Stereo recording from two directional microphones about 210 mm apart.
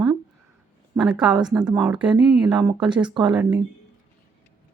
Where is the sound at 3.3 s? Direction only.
5° right (ahead or behind).